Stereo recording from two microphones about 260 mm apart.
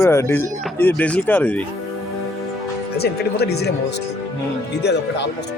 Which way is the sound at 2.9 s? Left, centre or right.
Left.